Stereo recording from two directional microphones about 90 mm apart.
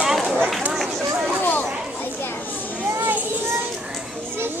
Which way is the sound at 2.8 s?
30° right (ahead or behind).